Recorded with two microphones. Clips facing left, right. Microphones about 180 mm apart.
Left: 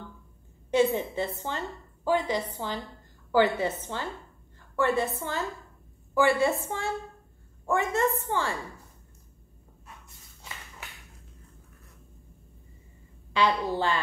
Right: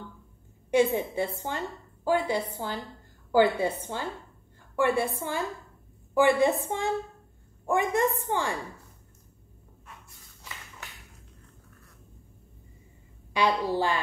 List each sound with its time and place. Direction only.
0.7 s a woman's voice: 10° right (ahead or behind)
13.3 s a woman's voice: 15° right (ahead or behind)